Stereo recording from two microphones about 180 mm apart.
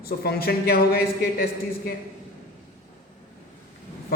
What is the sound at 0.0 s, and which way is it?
Speech, 60° left (ahead or behind).